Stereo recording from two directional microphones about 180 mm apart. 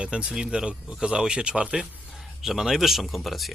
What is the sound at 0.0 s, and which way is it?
A man's voice, 5° right (ahead or behind).